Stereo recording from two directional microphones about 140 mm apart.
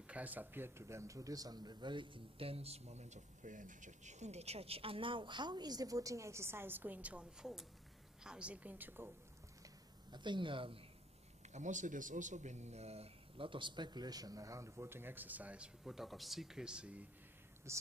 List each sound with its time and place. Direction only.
0.0 s a woman's voice: 10° right (ahead or behind)
10.1 s speech: 35° right (ahead or behind)
11.5 s speech: 60° right (ahead or behind); by 17.0 s 5° right (ahead or behind)
17.7 s speech: 20° right (ahead or behind)